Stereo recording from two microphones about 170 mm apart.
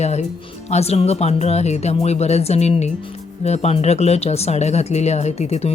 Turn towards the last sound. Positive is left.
turn(degrees=40)  # may be behind; listen again after turning